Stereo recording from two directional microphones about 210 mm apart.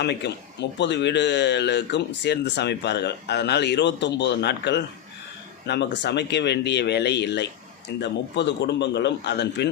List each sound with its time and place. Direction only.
0.0 s speech: 55° left (ahead or behind)